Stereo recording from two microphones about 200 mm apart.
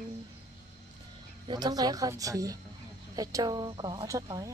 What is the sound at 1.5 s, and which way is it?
Speech, 20° right (ahead or behind).